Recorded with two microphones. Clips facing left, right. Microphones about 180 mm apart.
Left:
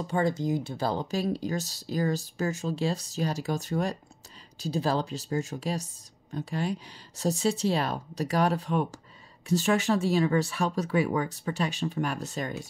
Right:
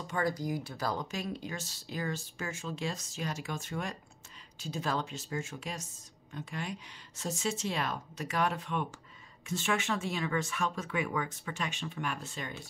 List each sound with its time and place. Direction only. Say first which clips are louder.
0.0 s speech: left 6 dB; 30° left (ahead or behind)